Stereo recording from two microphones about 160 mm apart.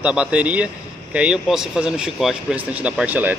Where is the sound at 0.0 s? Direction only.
5° right (ahead or behind).